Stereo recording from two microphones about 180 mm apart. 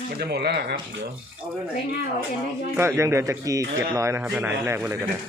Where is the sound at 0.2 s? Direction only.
65° right (ahead or behind).